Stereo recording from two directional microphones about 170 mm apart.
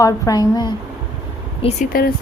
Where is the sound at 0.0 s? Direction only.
20° left (ahead or behind).